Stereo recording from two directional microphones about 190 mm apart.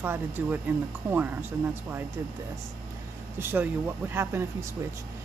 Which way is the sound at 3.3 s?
10° right (ahead or behind).